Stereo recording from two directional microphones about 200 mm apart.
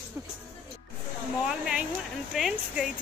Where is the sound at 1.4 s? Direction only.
5° right (ahead or behind).